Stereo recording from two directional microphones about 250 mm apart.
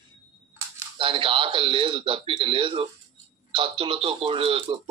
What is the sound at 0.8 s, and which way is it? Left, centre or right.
A man's voice, right.